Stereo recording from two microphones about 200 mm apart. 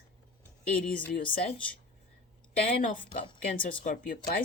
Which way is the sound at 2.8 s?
40° left (ahead or behind).